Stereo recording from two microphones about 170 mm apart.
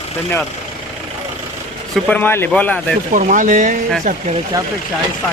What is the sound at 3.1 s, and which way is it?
Speech, 50° right (ahead or behind).